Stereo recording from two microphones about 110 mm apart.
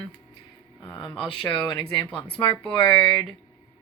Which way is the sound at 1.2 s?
50° left (ahead or behind).